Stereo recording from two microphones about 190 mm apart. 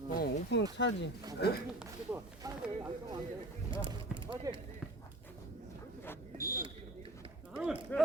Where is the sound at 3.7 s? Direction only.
25° right (ahead or behind).